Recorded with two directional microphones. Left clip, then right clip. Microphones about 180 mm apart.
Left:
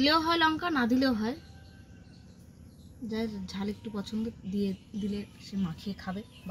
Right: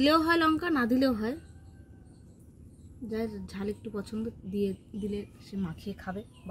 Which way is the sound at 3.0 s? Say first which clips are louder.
Right 1 dB; centre (ahead or behind).